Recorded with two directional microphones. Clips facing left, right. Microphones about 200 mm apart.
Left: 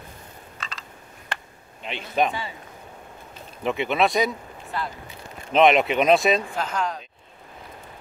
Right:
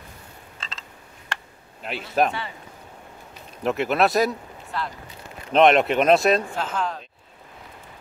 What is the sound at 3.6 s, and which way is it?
Speech, centre (ahead or behind).